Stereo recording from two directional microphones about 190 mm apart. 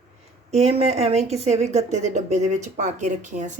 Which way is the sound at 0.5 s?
35° right (ahead or behind).